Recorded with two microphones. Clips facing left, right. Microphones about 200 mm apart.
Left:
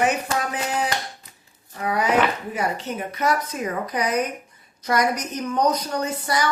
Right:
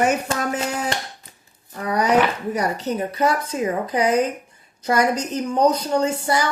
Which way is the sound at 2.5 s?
35° right (ahead or behind).